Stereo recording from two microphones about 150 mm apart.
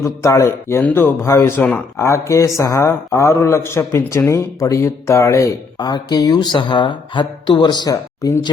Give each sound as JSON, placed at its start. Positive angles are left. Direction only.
{"t": 0.0, "sound": "a man's voice", "side_deg": 20}